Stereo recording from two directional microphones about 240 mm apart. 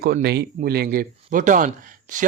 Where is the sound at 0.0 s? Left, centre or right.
Right.